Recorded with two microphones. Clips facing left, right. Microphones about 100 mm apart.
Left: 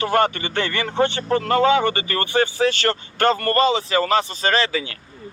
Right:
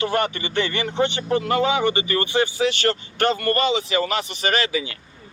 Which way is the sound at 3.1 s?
40° left (ahead or behind).